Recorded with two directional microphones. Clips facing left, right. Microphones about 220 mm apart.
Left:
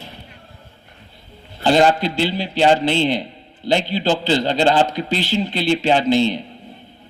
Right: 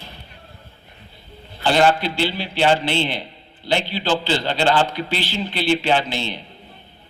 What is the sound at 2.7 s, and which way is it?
A man's voice, 45° left (ahead or behind).